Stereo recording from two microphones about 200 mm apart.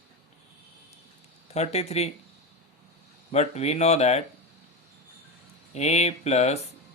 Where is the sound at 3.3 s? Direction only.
30° left (ahead or behind).